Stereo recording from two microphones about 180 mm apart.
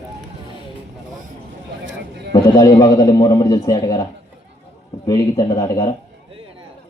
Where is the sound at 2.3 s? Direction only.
20° left (ahead or behind).